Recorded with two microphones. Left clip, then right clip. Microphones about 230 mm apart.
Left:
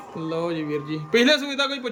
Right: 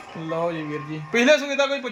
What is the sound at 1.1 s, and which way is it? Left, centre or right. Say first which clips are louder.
Speech: right 1 dB; centre.